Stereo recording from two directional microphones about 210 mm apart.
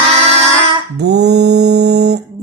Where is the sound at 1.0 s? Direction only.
55° right (ahead or behind).